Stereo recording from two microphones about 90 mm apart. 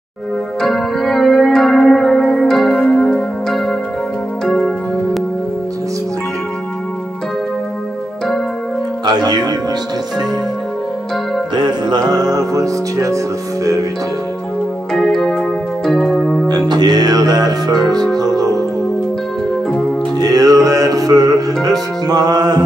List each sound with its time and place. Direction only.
0.6 s music: 5° left (ahead or behind)
9.0 s music: 55° right (ahead or behind)
11.5 s music: 55° right (ahead or behind); by 13.2 s 35° right (ahead or behind)
14.9 s music: 5° left (ahead or behind)
16.4 s music: 50° right (ahead or behind)
20.2 s music: 45° right (ahead or behind)